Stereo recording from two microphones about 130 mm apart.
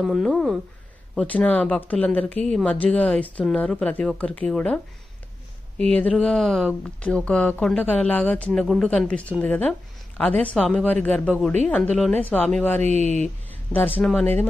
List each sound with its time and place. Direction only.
0.0 s speech: centre (ahead or behind)
5.8 s speech: 10° left (ahead or behind)
12.8 s speech: 60° right (ahead or behind)
13.9 s speech: 10° left (ahead or behind)